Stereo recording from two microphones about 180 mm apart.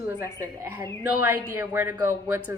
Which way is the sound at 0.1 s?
15° right (ahead or behind).